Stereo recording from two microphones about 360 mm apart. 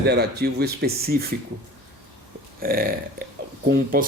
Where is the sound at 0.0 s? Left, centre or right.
Right.